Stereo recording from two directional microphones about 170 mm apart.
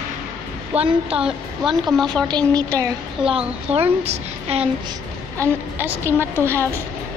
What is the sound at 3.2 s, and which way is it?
A woman's voice, 35° right (ahead or behind).